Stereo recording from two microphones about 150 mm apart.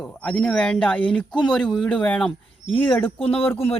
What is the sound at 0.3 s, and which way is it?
Speech, 5° left (ahead or behind).